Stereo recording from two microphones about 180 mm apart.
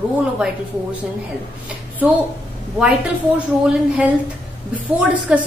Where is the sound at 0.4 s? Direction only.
5° right (ahead or behind).